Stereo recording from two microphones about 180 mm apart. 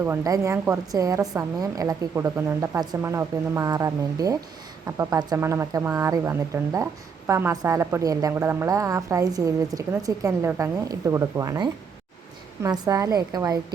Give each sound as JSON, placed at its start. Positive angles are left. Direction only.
{"t": 0.0, "sound": "a woman's voice", "side_deg": -15}